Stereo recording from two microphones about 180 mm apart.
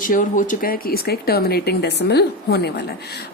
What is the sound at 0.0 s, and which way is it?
Speech, 45° left (ahead or behind).